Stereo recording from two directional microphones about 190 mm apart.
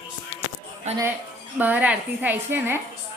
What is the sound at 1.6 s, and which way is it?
A woman's voice, 10° right (ahead or behind).